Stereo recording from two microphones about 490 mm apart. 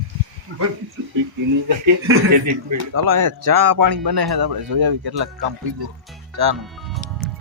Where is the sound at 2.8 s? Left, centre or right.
Right.